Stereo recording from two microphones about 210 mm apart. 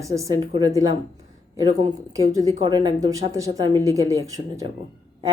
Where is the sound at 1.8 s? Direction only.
15° right (ahead or behind).